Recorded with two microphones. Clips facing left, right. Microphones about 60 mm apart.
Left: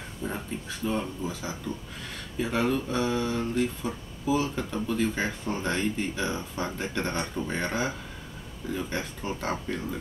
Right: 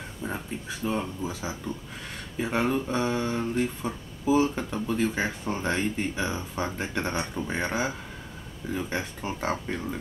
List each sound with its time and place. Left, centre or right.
0.2 s speech: centre